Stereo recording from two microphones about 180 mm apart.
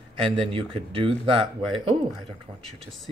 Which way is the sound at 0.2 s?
30° right (ahead or behind).